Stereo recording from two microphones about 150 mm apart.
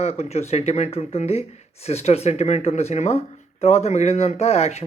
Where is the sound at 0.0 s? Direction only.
45° left (ahead or behind).